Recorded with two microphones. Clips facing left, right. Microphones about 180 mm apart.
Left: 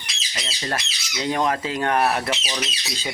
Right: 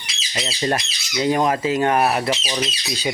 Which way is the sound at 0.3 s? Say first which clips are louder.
Right 7 dB; 20° right (ahead or behind).